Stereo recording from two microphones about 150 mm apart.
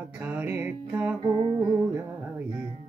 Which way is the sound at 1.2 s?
35° right (ahead or behind).